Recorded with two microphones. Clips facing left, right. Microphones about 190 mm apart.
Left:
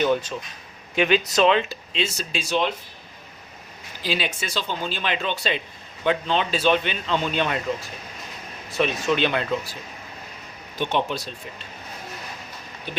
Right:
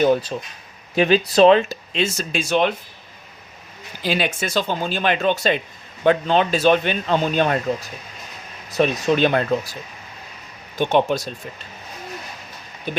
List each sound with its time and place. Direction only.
0.0 s speech: 35° right (ahead or behind); by 2.7 s 55° right (ahead or behind)
4.0 s speech: 55° right (ahead or behind)
10.8 s speech: 45° right (ahead or behind)